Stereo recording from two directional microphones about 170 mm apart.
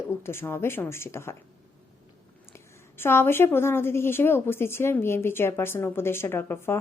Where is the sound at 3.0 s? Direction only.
15° left (ahead or behind).